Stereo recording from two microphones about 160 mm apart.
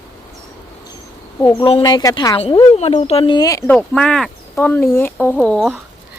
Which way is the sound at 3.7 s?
5° left (ahead or behind).